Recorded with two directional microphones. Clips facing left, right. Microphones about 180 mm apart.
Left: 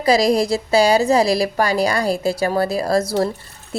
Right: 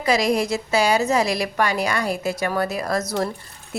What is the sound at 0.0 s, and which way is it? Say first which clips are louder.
A woman's voice: left 4 dB; 35° left (ahead or behind).